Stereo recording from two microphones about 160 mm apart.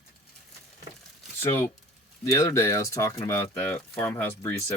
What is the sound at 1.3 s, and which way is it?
Speech, 15° left (ahead or behind).